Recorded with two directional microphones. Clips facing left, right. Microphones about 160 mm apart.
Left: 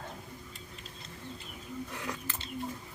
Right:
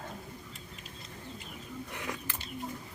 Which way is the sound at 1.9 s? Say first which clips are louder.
Even; 20° right (ahead or behind).